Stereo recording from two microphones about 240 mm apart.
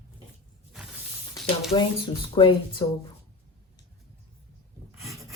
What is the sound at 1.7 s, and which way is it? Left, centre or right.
Speech, left.